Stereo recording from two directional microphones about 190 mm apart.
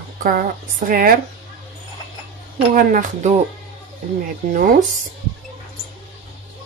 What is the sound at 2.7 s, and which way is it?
Speech, 40° right (ahead or behind).